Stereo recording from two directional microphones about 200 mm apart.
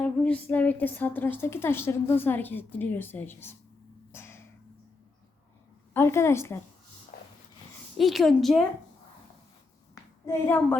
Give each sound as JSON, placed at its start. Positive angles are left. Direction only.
{"t": 0.0, "sound": "a woman's voice", "side_deg": 5}
{"t": 4.1, "sound": "a sound", "side_deg": 10}
{"t": 5.9, "sound": "a woman's voice", "side_deg": 10}
{"t": 7.1, "sound": "dog", "side_deg": 50}
{"t": 7.9, "sound": "a woman's voice", "side_deg": 0}
{"t": 10.2, "sound": "a woman's voice", "side_deg": 10}